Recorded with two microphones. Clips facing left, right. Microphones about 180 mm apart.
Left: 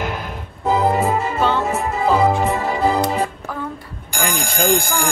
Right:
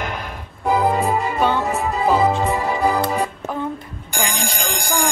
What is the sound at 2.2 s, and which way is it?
Music, 20° left (ahead or behind).